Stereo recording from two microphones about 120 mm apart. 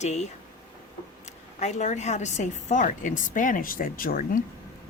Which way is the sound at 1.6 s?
80° left.